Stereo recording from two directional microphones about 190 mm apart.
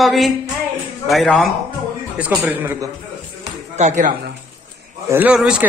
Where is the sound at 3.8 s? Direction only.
40° right (ahead or behind).